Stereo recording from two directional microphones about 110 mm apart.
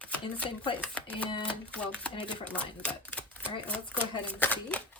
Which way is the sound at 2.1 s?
55° left (ahead or behind).